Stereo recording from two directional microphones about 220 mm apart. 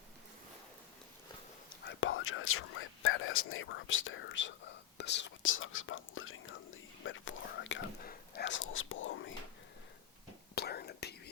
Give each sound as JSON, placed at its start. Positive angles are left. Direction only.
{"t": 1.8, "sound": "whispering", "side_deg": 60}
{"t": 8.0, "sound": "whispering", "side_deg": 45}
{"t": 10.5, "sound": "whispering", "side_deg": 45}